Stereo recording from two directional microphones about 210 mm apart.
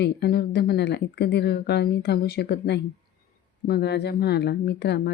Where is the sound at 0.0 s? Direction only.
50° left (ahead or behind).